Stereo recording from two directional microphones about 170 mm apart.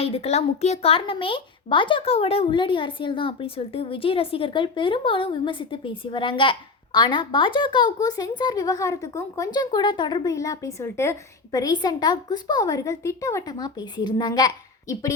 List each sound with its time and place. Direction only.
0.0 s speech: 35° left (ahead or behind)